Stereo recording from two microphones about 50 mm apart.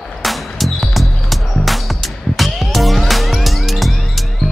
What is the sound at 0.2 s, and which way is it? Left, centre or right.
Music, centre.